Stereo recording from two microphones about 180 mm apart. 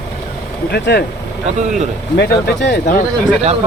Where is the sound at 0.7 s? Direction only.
65° left (ahead or behind).